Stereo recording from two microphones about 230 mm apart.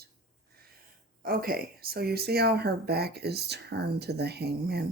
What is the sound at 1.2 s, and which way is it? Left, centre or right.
Speech, right.